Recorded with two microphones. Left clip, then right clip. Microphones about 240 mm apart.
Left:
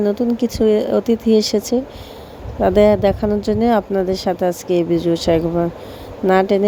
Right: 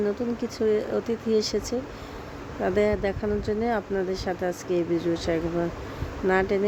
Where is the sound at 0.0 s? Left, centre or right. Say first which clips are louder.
Left 9 dB; left.